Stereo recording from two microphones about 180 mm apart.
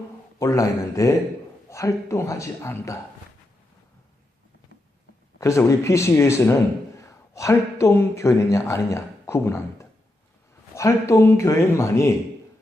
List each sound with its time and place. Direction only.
0.3 s speech: 20° left (ahead or behind)
5.4 s a man's voice: 15° left (ahead or behind)
10.8 s speech: 15° left (ahead or behind)